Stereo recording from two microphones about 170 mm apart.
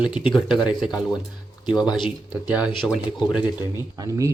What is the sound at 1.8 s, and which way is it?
Speech, 25° left (ahead or behind).